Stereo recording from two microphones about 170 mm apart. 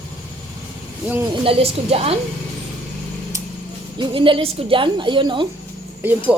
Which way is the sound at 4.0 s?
30° right (ahead or behind).